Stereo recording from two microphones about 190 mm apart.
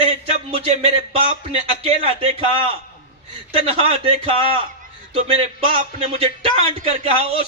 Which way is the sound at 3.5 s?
30° right (ahead or behind).